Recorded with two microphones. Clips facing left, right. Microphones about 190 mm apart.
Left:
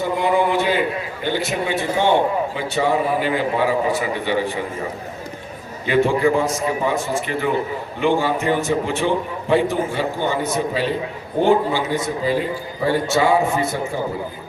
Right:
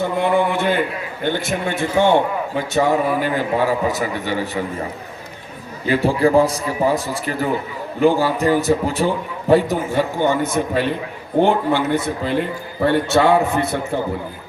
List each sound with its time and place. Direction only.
0.2 s a man's voice: 55° right (ahead or behind)
5.9 s a man's voice: 35° right (ahead or behind); by 13.7 s 60° right (ahead or behind)